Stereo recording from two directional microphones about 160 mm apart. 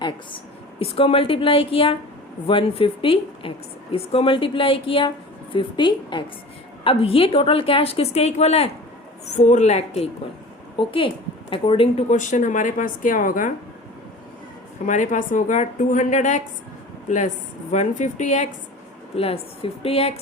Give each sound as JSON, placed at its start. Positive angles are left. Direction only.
{"t": 0.0, "sound": "a woman's voice", "side_deg": 35}
{"t": 10.8, "sound": "a woman's voice", "side_deg": 35}
{"t": 14.8, "sound": "a woman's voice", "side_deg": 50}
{"t": 19.1, "sound": "speech", "side_deg": 40}